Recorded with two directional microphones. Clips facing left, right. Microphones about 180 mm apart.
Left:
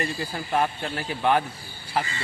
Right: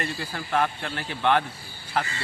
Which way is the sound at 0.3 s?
20° left (ahead or behind).